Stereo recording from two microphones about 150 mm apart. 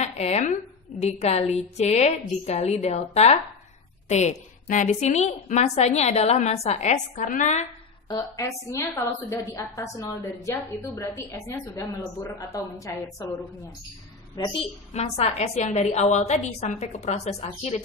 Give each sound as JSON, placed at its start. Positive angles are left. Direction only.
{"t": 0.0, "sound": "a woman's voice", "side_deg": 45}
{"t": 8.1, "sound": "a woman's voice", "side_deg": 25}
{"t": 14.3, "sound": "a woman's voice", "side_deg": 30}